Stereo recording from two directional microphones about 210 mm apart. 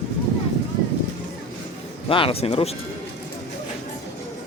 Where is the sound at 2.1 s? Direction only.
25° left (ahead or behind).